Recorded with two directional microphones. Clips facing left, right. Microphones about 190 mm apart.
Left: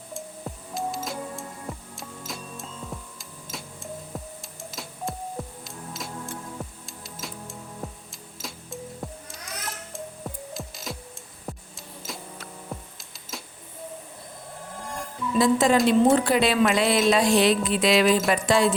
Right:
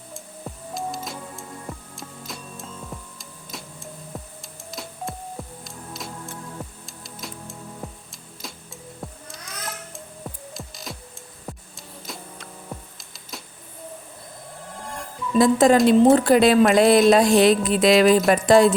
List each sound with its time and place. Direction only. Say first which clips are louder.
0.1 s music: left 2 dB; centre (ahead or behind)
4.1 s a sound: right 2 dB; centre (ahead or behind)
4.7 s music: right 1 dB; centre (ahead or behind)
11.5 s a sound: even; centre (ahead or behind)
12.0 s vehicle: even; centre (ahead or behind)
15.4 s speech: right 4 dB; 45° right (ahead or behind)